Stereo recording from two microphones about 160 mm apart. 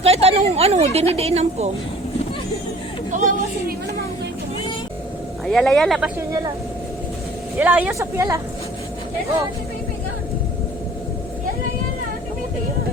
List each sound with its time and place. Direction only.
0.0 s a sound: 40° right (ahead or behind)
1.1 s speech: 40° right (ahead or behind)
5.5 s speech: 5° left (ahead or behind)
6.1 s speech: 20° right (ahead or behind)
7.6 s speech: 10° right (ahead or behind)